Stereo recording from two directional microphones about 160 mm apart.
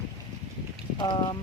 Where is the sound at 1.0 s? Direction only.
30° left (ahead or behind).